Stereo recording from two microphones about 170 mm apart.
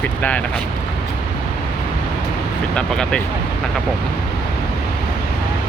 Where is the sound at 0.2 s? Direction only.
10° left (ahead or behind).